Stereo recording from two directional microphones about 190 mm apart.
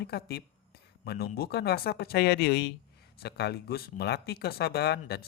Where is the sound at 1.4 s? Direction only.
55° left (ahead or behind).